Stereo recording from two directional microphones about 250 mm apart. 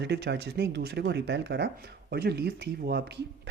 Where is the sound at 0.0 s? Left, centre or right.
Right.